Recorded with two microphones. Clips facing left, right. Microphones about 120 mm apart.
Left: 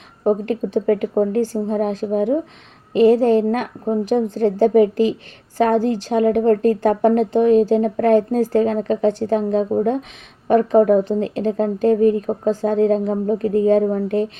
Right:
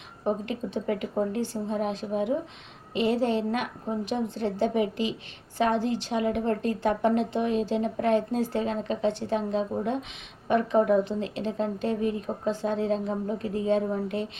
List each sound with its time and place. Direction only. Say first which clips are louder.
0.3 s speech: left 10 dB; 45° left (ahead or behind)